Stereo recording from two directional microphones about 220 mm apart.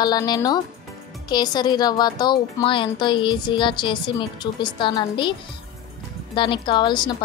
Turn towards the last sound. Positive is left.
turn(degrees=20)  # may be behind; listen again after turning